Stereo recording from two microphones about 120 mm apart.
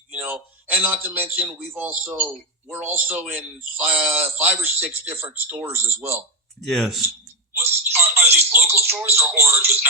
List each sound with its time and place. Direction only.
0.1 s a man's voice: 15° right (ahead or behind)
6.7 s speech: 5° left (ahead or behind)
7.5 s telephone: 20° right (ahead or behind)
9.2 s speech: 20° right (ahead or behind)